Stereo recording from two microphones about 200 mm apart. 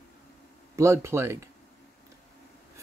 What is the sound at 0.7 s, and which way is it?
Speech, 15° right (ahead or behind).